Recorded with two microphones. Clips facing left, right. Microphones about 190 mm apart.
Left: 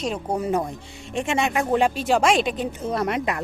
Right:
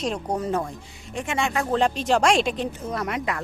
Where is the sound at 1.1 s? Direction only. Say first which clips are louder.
Left 3 dB; 25° left (ahead or behind); by 2.6 s centre (ahead or behind).